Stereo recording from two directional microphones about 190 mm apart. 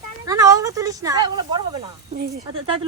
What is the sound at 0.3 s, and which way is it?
Speech, 20° right (ahead or behind).